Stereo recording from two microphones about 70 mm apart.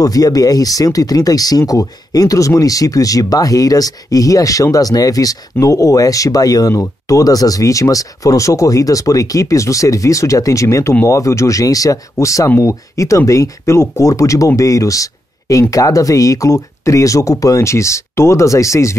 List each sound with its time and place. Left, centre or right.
0.0 s speech: left